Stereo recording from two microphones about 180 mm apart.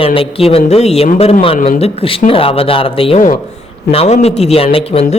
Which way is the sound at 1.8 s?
30° left (ahead or behind).